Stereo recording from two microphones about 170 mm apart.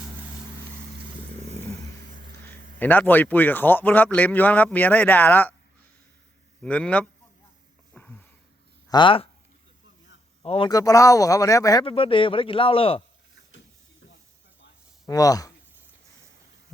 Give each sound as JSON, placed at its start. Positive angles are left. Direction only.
{"t": 2.5, "sound": "a man's voice", "side_deg": 10}
{"t": 6.6, "sound": "a man's voice", "side_deg": 5}
{"t": 7.9, "sound": "a sound", "side_deg": 10}
{"t": 8.9, "sound": "speech", "side_deg": 30}
{"t": 10.4, "sound": "a man's voice", "side_deg": 35}
{"t": 10.7, "sound": "speech", "side_deg": 20}
{"t": 15.0, "sound": "speech", "side_deg": 20}